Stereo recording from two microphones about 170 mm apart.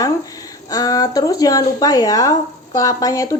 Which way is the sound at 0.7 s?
20° left (ahead or behind).